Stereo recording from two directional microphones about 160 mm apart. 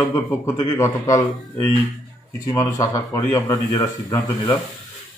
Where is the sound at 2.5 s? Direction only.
20° left (ahead or behind).